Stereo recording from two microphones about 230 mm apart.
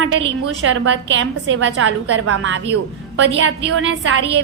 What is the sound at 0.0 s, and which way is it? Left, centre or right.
A woman's voice, right.